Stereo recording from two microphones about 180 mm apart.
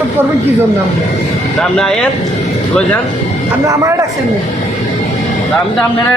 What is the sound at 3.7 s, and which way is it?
Speech, 15° right (ahead or behind).